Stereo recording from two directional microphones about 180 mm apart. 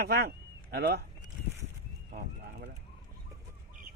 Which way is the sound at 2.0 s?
60° right (ahead or behind).